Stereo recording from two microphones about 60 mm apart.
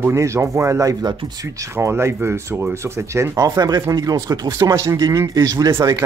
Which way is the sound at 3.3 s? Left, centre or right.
Right.